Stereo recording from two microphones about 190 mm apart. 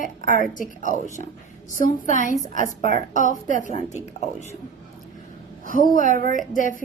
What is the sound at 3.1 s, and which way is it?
Speech, 40° left (ahead or behind).